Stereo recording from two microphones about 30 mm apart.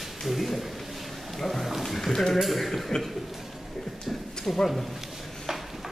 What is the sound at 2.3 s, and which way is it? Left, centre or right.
Speech, centre.